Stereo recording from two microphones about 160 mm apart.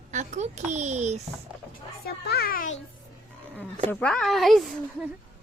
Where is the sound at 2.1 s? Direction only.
80° left; by 2.7 s 60° left (ahead or behind).